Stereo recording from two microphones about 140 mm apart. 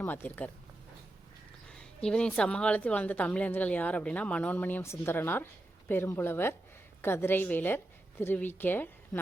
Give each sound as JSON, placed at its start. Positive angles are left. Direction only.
{"t": 0.0, "sound": "a woman's voice", "side_deg": 15}
{"t": 1.6, "sound": "a woman's voice", "side_deg": 5}